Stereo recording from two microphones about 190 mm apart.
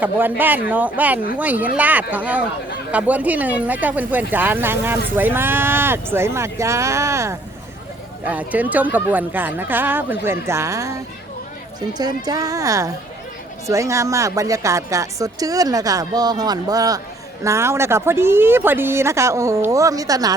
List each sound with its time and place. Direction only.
0.0 s a woman's voice: 10° right (ahead or behind)